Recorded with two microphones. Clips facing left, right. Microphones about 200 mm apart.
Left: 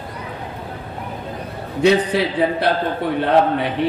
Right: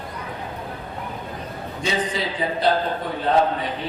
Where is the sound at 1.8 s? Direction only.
65° left (ahead or behind).